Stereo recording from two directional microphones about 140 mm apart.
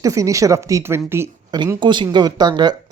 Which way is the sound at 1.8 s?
35° right (ahead or behind).